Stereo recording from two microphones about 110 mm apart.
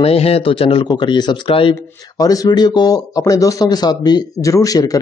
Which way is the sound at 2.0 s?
35° left (ahead or behind).